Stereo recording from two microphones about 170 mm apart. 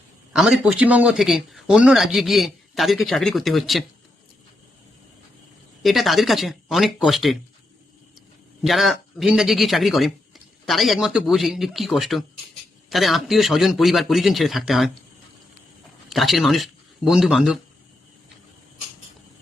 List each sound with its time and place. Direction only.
0.3 s speech: 5° right (ahead or behind)
5.8 s speech: centre (ahead or behind)
8.6 s speech: centre (ahead or behind)
16.1 s speech: centre (ahead or behind)